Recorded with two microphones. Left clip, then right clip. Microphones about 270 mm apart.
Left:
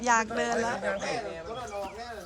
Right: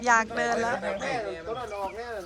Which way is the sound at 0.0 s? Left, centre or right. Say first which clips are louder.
Right 3 dB; centre.